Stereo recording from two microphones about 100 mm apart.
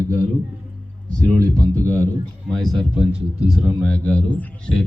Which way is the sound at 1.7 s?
15° left (ahead or behind).